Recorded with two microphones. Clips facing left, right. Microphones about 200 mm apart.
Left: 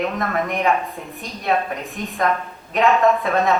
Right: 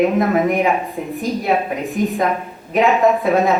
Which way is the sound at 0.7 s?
15° right (ahead or behind).